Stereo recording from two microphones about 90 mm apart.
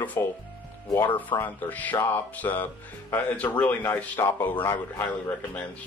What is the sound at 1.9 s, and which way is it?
Speech, 30° left (ahead or behind).